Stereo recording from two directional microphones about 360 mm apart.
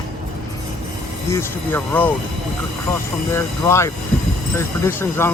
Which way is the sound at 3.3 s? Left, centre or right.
Centre.